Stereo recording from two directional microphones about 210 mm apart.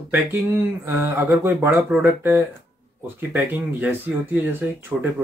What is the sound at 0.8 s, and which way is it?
Speech, 10° right (ahead or behind).